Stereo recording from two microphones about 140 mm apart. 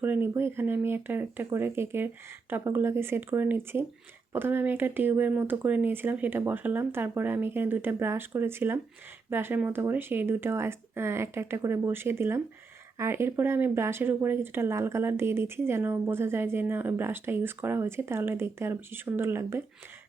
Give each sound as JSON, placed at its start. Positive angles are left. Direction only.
{"t": 0.0, "sound": "speech", "side_deg": -15}